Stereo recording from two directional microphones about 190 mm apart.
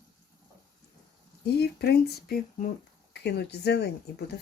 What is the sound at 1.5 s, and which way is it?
A woman's voice, 55° left (ahead or behind).